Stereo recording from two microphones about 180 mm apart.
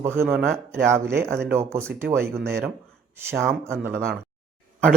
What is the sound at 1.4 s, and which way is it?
Speech, 15° right (ahead or behind).